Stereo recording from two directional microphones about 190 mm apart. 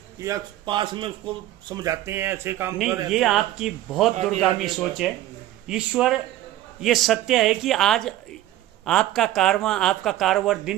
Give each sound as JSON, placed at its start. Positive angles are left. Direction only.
{"t": 0.2, "sound": "speech", "side_deg": -20}
{"t": 3.1, "sound": "speech", "side_deg": 0}